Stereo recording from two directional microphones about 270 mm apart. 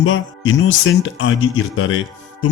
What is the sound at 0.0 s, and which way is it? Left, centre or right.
A man's voice, left.